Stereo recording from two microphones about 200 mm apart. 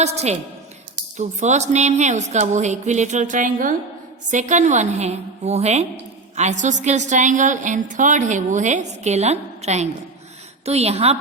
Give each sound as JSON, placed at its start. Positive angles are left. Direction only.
{"t": 0.0, "sound": "a woman's voice", "side_deg": -35}